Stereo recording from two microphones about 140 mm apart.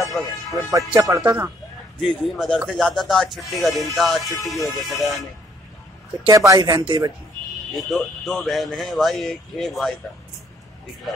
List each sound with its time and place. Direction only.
0.0 s music: centre (ahead or behind)
0.7 s speech: 25° right (ahead or behind)
2.0 s speech: 5° left (ahead or behind)
6.2 s speech: 25° right (ahead or behind)
7.7 s speech: centre (ahead or behind)